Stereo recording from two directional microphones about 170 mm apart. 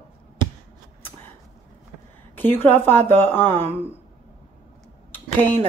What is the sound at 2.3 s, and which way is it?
A woman's voice, 10° left (ahead or behind).